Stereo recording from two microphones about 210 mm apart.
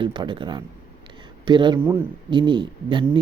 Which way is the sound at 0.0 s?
20° right (ahead or behind).